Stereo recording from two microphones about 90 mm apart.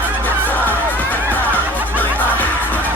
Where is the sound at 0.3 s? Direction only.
20° left (ahead or behind).